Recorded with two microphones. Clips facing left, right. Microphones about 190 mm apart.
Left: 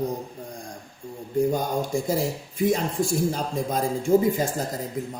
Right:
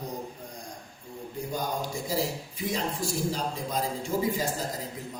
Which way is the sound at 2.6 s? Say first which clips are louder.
Left 8 dB; 50° left (ahead or behind).